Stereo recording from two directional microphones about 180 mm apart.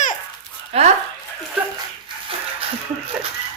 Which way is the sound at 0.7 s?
35° right (ahead or behind).